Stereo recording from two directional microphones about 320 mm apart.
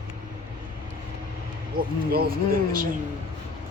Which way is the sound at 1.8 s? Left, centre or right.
Right.